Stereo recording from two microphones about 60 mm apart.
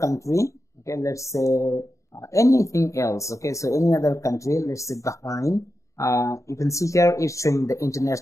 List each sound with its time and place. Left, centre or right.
0.0 s speech: left